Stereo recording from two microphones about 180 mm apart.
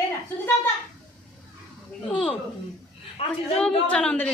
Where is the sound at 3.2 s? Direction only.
30° left (ahead or behind).